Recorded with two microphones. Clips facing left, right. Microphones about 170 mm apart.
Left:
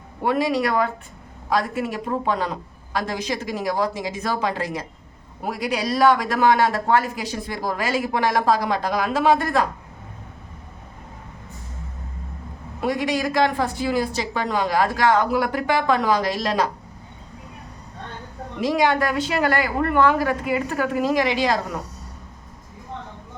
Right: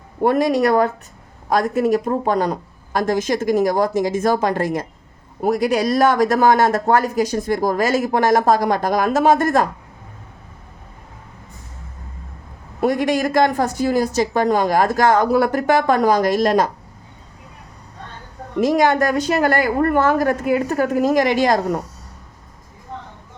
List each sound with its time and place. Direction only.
0.2 s a man's voice: 45° right (ahead or behind)
12.8 s a man's voice: 50° right (ahead or behind)
18.6 s a man's voice: 45° right (ahead or behind)